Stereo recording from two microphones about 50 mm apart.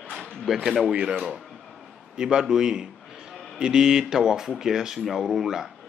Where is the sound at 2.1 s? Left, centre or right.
Centre.